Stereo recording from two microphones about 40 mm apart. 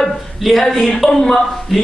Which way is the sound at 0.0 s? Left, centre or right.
Centre.